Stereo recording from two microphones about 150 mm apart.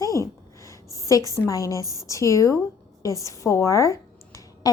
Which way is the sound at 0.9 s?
20° left (ahead or behind).